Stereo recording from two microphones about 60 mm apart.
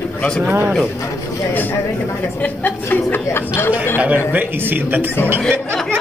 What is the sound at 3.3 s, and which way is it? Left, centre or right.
Speech, left.